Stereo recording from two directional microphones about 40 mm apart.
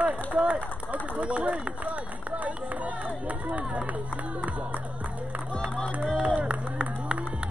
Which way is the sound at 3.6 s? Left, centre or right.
Right.